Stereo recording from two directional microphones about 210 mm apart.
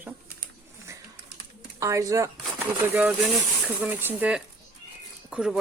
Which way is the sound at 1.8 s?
15° right (ahead or behind).